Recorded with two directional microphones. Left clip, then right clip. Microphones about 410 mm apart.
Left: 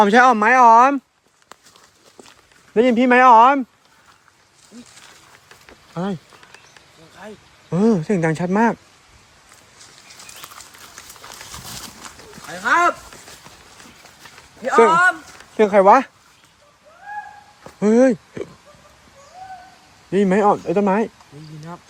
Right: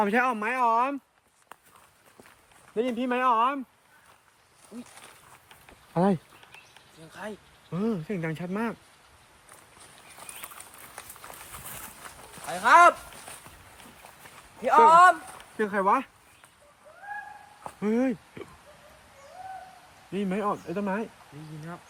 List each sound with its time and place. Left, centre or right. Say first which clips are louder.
0.0 s speech: left 13 dB; centre
2.7 s speech: left 13 dB; left
3.2 s speech: left 14 dB; centre
5.9 s speech: right 2 dB; centre
7.7 s speech: left 13 dB; centre
12.5 s a man's voice: even; centre
14.6 s a man's voice: left 3 dB; centre
15.5 s speech: left 13 dB; centre
17.7 s speech: left 13 dB; centre
20.1 s speech: left 14 dB; centre